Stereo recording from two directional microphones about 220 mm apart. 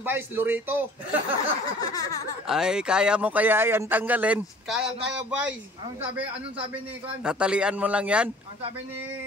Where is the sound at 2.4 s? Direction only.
5° right (ahead or behind).